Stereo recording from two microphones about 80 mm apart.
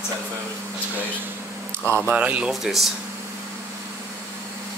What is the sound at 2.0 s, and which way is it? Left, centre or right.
Speech, centre.